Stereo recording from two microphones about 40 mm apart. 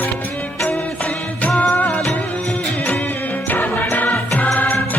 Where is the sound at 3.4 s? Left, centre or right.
Left.